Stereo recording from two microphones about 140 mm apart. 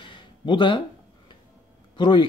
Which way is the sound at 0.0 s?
35° left (ahead or behind).